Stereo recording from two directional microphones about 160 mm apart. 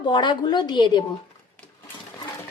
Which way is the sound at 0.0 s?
30° left (ahead or behind).